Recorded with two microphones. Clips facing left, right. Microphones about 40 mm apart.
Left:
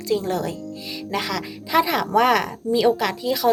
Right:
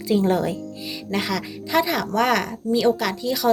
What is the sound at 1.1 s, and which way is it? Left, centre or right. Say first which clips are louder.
A woman's voice: right 1 dB; centre.